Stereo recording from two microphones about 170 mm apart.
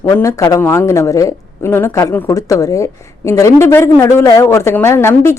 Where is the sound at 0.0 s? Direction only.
20° left (ahead or behind).